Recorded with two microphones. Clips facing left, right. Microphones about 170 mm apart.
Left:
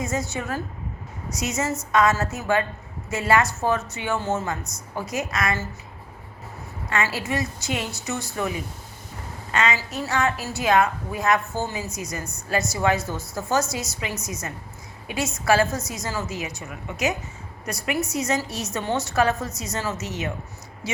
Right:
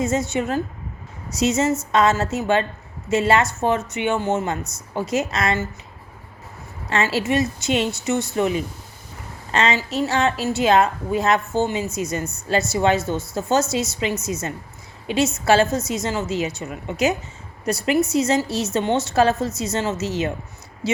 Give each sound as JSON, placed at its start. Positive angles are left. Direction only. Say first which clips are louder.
{"t": 0.0, "sound": "a woman's voice", "louder": "right 6 dB", "side_deg": -25}
{"t": 7.2, "sound": "a woman's voice", "louder": "right 7 dB", "side_deg": -25}